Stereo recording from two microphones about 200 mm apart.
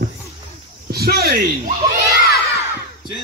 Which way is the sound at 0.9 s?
50° right (ahead or behind).